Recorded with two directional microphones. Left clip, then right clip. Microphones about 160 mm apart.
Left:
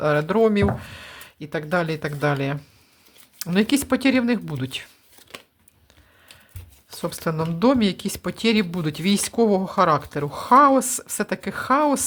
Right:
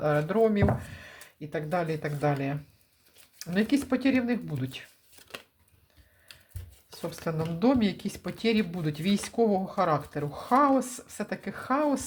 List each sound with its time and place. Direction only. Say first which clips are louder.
0.0 s speech: left 6 dB; 35° left (ahead or behind)
6.9 s speech: left 7 dB; 40° left (ahead or behind)